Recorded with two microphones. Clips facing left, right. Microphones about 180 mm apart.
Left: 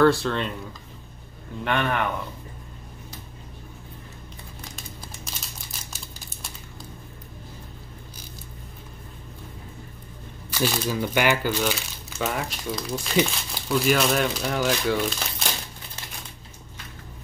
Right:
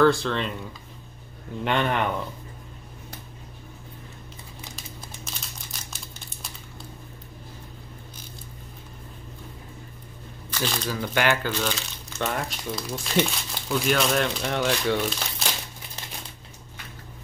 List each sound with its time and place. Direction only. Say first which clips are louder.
0.0 s speech: left 1 dB; centre (ahead or behind)
1.6 s speech: right 1 dB; 20° right (ahead or behind)
5.2 s crumpling: even; centre (ahead or behind)
10.5 s speech: left 4 dB; 5° left (ahead or behind)